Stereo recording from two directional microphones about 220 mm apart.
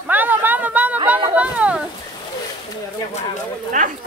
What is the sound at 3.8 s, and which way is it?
Speech, 35° right (ahead or behind).